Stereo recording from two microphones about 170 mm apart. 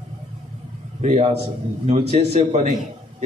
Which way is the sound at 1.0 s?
40° right (ahead or behind).